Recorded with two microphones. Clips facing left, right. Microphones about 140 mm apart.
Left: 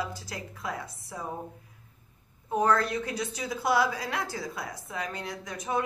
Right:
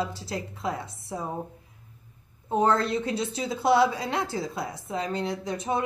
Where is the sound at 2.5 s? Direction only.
25° right (ahead or behind).